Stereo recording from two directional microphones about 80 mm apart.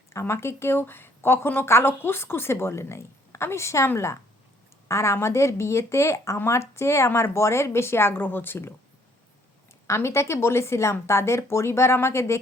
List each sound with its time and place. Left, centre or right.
0.1 s speech: left
9.8 s speech: left